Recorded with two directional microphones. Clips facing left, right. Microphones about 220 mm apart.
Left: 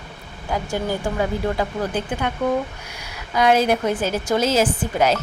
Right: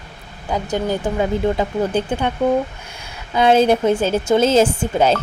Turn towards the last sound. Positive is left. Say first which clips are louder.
# right 3 dB
turn(degrees=-30)  # may be behind; listen again after turning